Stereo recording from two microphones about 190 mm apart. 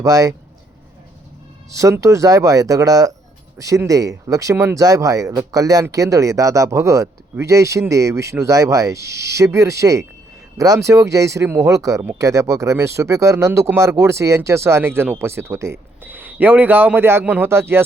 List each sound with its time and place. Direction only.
0.0 s speech: 20° right (ahead or behind)
1.7 s speech: 15° right (ahead or behind)